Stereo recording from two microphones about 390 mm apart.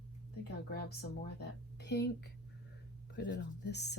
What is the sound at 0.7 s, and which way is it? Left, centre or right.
A woman's voice, left.